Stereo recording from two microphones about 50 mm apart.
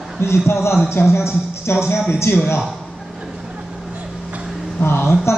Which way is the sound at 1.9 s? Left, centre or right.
Centre.